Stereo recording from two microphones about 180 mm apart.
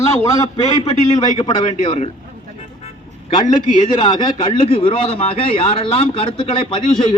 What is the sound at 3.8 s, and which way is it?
A man's voice, 25° left (ahead or behind).